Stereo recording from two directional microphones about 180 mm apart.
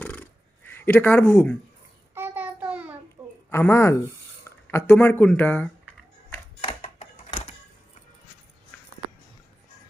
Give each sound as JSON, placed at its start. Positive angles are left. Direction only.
{"t": 0.0, "sound": "a sound", "side_deg": 10}
{"t": 0.7, "sound": "speech", "side_deg": 10}
{"t": 2.1, "sound": "child singing", "side_deg": -10}
{"t": 3.5, "sound": "speech", "side_deg": 15}
{"t": 6.6, "sound": "typewriter", "side_deg": 35}